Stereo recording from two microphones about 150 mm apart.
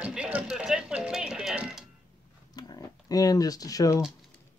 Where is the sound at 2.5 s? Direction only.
25° left (ahead or behind).